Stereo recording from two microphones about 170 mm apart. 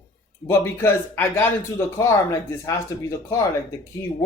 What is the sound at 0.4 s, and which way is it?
Speech, 15° left (ahead or behind).